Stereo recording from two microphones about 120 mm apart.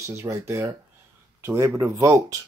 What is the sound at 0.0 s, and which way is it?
Speech, 20° right (ahead or behind).